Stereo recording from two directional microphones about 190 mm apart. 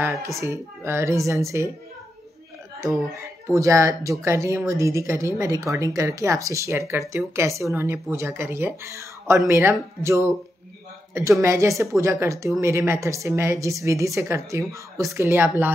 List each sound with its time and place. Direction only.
0.0 s speech: 15° right (ahead or behind)
3.4 s speech: 15° right (ahead or behind)